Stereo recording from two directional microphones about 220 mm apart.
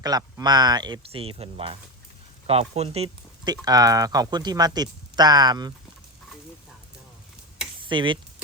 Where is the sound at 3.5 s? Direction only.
15° right (ahead or behind).